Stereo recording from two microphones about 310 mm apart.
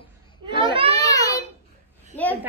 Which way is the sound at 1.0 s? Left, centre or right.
Centre.